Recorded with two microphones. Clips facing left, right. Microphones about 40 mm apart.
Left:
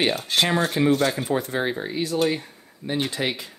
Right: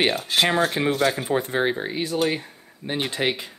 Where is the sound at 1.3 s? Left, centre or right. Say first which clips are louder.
Right 2 dB; right.